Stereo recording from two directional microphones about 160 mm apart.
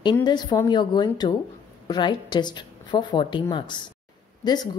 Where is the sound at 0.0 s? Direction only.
25° left (ahead or behind).